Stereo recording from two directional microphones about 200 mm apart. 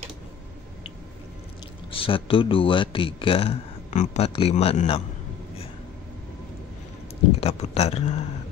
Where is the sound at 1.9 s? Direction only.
25° left (ahead or behind).